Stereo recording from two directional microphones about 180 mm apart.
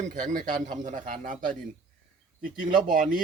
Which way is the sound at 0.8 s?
45° right (ahead or behind).